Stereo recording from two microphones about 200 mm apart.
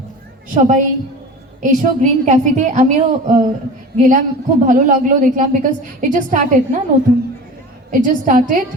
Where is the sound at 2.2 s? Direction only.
35° right (ahead or behind).